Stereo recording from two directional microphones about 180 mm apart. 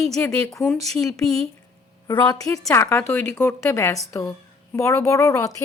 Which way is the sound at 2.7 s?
15° left (ahead or behind).